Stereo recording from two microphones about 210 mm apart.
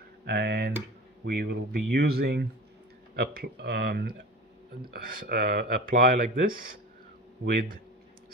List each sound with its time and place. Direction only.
0.2 s speech: 50° right (ahead or behind)